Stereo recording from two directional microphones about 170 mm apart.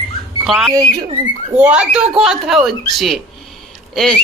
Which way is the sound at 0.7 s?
20° right (ahead or behind).